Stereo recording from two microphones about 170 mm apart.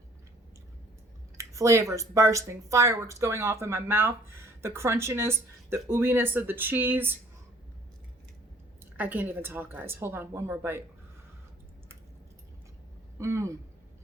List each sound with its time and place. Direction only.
1.4 s speech: 20° right (ahead or behind)
8.8 s speech: 10° right (ahead or behind)
13.1 s speech: 15° right (ahead or behind)